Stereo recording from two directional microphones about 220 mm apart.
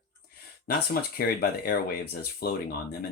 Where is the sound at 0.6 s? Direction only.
45° left (ahead or behind).